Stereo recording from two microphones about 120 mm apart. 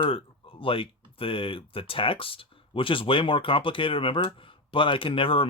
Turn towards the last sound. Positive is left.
turn(degrees=50)  # may be behind; listen again after turning